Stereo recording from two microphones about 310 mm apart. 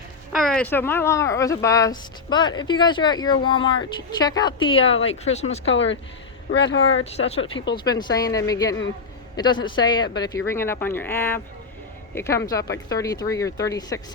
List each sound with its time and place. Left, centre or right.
0.3 s speech: centre; by 5.5 s left
5.6 s speech: left
7.0 s speech: centre